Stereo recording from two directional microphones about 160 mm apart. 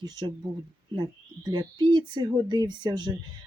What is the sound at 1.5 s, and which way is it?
Speech, 25° right (ahead or behind).